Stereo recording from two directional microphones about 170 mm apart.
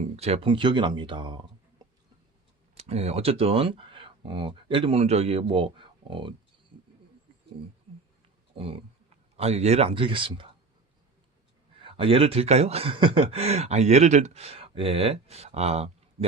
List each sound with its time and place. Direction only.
0.0 s speech: 40° right (ahead or behind)
2.7 s speech: 35° right (ahead or behind)
8.5 s wild animals: 35° right (ahead or behind)
9.4 s speech: 40° right (ahead or behind)
11.8 s speech: 30° right (ahead or behind)